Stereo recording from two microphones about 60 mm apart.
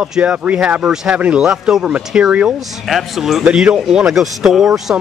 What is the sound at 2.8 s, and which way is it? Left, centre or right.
Speech, centre.